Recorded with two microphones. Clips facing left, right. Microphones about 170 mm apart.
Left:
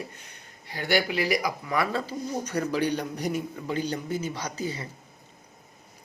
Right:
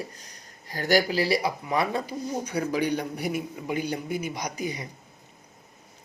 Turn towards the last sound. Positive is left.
turn(degrees=-15)  # may be behind; listen again after turning